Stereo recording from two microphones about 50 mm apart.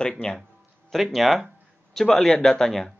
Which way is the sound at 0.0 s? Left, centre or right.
Centre.